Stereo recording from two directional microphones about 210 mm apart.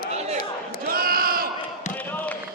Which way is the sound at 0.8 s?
45° right (ahead or behind).